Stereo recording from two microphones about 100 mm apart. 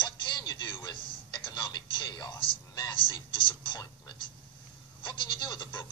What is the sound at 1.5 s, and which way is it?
Music, 50° left (ahead or behind).